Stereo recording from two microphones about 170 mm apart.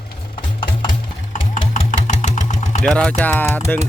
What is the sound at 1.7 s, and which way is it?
Engine, 45° left (ahead or behind).